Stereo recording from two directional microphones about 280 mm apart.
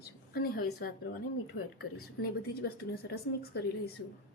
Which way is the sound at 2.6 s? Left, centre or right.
Left.